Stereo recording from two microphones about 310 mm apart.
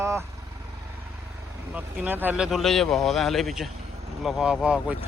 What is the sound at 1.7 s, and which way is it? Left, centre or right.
Speech, centre.